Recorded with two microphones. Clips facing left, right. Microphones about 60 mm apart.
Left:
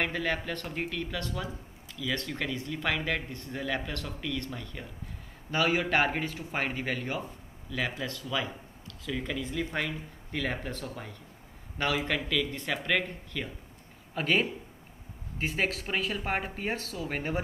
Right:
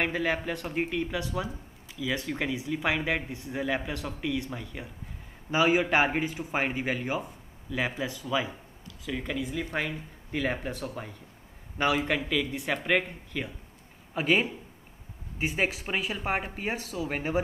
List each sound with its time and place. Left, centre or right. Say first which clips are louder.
0.0 s a man's voice: right 2 dB; centre